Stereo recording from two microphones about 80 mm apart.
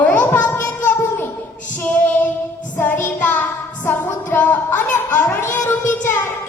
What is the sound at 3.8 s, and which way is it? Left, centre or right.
Music, left.